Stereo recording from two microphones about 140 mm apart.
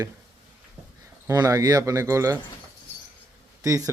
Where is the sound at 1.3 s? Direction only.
25° right (ahead or behind).